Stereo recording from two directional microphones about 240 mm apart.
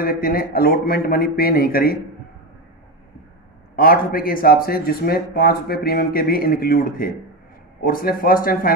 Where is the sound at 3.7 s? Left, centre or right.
Left.